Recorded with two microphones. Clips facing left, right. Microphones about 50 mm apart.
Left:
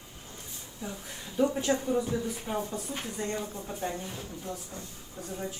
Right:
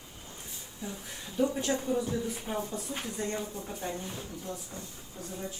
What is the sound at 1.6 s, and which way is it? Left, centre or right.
Speech, left.